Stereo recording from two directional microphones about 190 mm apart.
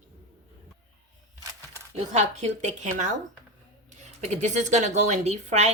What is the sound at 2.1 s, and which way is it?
A woman's voice, 35° right (ahead or behind).